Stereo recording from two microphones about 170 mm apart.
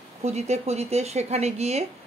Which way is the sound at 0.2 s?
40° right (ahead or behind).